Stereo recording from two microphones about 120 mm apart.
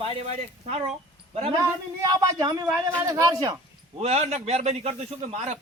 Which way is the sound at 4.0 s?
65° right (ahead or behind).